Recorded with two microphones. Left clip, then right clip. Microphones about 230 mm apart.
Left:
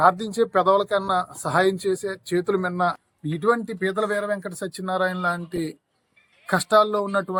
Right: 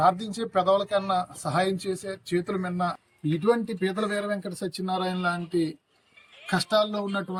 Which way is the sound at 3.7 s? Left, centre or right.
Centre.